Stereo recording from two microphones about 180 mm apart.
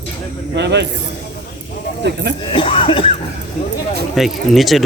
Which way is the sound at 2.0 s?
75° right (ahead or behind).